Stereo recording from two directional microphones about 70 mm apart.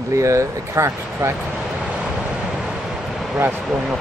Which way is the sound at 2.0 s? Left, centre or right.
Centre.